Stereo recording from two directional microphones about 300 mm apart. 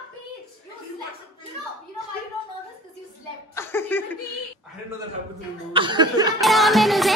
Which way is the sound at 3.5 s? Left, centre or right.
Centre.